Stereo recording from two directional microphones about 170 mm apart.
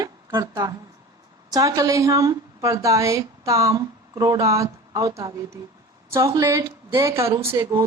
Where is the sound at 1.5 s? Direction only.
20° right (ahead or behind).